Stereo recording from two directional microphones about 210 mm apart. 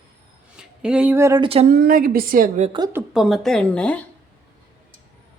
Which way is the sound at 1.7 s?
45° right (ahead or behind).